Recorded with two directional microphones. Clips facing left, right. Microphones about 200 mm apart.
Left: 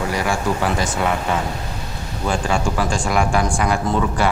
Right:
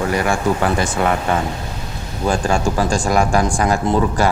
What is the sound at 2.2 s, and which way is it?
Speech, 40° right (ahead or behind).